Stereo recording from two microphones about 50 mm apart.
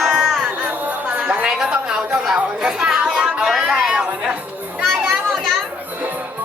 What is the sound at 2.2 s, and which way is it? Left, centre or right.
Chatter, centre.